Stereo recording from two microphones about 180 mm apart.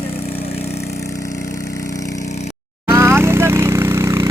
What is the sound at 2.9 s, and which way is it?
Vehicle, 15° right (ahead or behind).